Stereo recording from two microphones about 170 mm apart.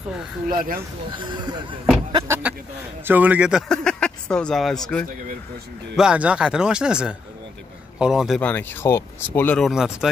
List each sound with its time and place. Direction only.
0.5 s speech: 55° right (ahead or behind)
1.1 s speech: 25° right (ahead or behind)
2.1 s speech: 15° right (ahead or behind)
8.4 s speech: 10° left (ahead or behind)
9.7 s speech: 5° right (ahead or behind)